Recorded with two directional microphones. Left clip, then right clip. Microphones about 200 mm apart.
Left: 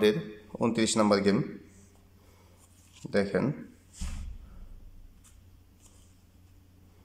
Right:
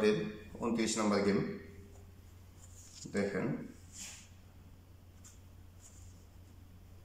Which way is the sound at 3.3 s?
45° left (ahead or behind).